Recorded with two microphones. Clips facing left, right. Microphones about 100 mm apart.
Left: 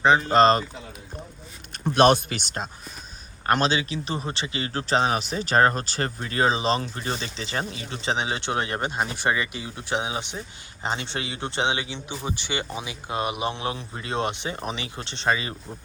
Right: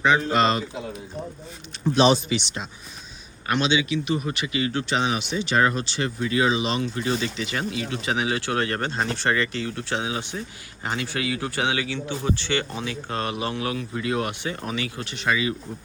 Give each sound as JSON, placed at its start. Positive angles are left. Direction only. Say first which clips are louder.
{"t": 0.0, "sound": "a man's voice", "louder": "left 3 dB", "side_deg": 35}
{"t": 2.0, "sound": "a man's voice", "louder": "left 1 dB", "side_deg": 55}